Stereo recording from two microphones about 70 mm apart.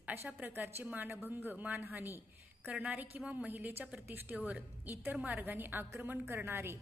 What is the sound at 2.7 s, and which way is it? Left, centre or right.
A woman's voice, centre.